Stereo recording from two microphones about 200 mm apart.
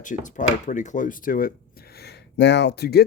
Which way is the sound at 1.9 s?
55° left (ahead or behind).